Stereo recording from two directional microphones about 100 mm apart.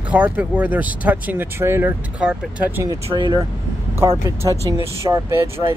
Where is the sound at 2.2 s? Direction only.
10° right (ahead or behind).